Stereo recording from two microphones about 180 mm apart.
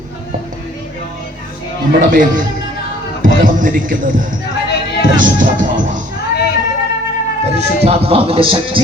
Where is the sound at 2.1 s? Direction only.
50° right (ahead or behind).